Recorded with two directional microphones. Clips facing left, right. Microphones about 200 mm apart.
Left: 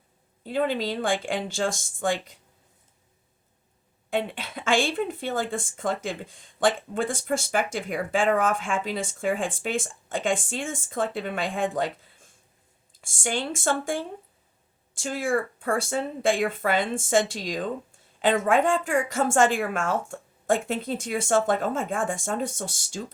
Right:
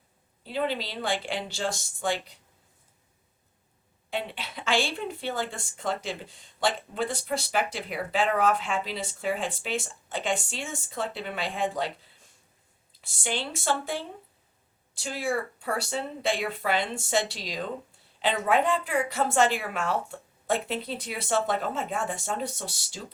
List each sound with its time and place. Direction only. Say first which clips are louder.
0.4 s speech: left 4 dB; 50° left (ahead or behind)
4.1 s speech: left 5 dB; 50° left (ahead or behind)
12.9 s speech: left 3 dB; 50° left (ahead or behind)